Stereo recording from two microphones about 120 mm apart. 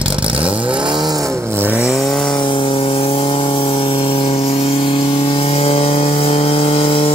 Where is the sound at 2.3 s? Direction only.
45° left (ahead or behind).